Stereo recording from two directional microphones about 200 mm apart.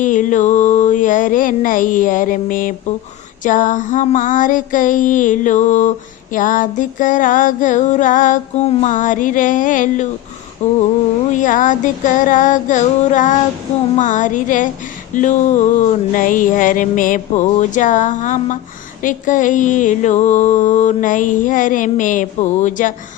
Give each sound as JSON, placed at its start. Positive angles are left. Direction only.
{"t": 0.0, "sound": "mantra", "side_deg": 40}